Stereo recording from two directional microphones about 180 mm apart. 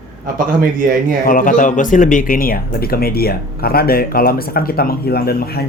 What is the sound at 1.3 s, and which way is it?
Speech, 50° left (ahead or behind).